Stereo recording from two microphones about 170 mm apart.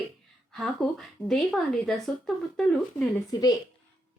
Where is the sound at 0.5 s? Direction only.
Centre (ahead or behind).